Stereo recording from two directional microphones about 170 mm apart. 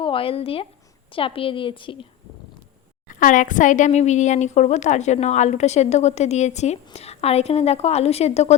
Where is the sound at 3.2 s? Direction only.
50° left (ahead or behind).